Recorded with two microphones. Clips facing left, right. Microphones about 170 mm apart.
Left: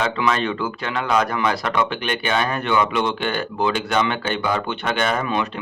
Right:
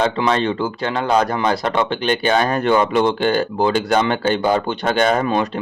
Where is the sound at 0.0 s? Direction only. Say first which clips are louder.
Right 4 dB; 30° right (ahead or behind).